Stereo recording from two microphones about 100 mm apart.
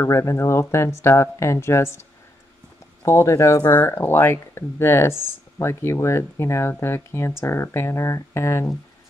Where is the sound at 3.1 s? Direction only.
30° left (ahead or behind).